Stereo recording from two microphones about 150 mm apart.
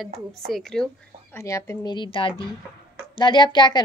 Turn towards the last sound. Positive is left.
turn(degrees=30)  # may be behind; listen again after turning